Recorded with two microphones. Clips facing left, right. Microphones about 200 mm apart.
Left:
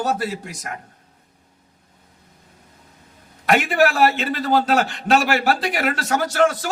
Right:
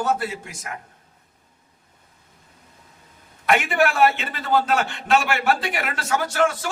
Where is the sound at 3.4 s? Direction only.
40° left (ahead or behind).